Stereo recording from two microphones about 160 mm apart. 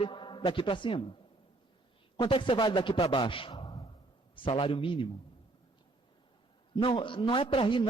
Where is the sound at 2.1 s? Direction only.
30° left (ahead or behind).